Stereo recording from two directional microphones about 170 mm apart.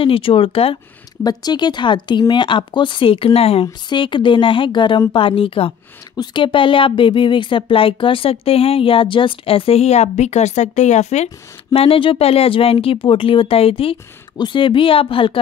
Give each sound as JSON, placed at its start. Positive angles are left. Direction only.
{"t": 0.0, "sound": "a woman's voice", "side_deg": 30}